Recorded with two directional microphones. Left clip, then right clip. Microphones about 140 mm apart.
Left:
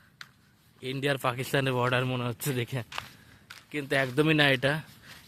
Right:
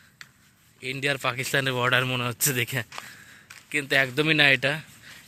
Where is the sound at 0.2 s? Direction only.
10° right (ahead or behind).